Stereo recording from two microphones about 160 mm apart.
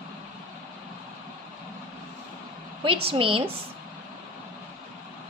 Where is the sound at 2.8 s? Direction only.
35° right (ahead or behind).